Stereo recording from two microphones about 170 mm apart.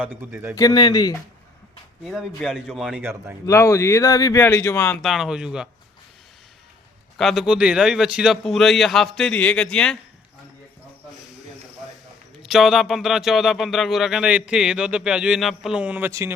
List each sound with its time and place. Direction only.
0.0 s speech: 10° right (ahead or behind)
0.5 s a man's voice: 25° left (ahead or behind)
2.0 s speech: centre (ahead or behind)
3.4 s a man's voice: 15° left (ahead or behind)
5.0 s speech: centre (ahead or behind)
7.2 s speech: centre (ahead or behind)
12.4 s speech: centre (ahead or behind)